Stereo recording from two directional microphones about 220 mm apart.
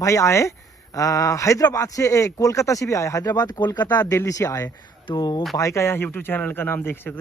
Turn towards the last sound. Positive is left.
turn(degrees=10)  # may be behind; listen again after turning